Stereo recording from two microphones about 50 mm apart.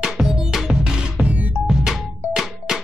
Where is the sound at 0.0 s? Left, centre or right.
Centre.